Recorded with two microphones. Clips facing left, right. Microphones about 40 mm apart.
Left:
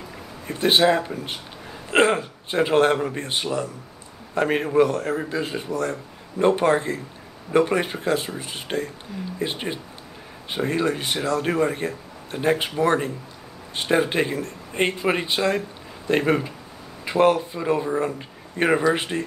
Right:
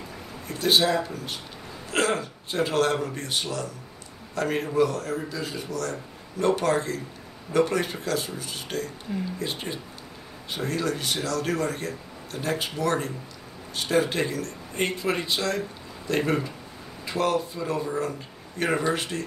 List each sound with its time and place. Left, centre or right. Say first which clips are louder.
0.5 s a man's voice: left 4 dB; left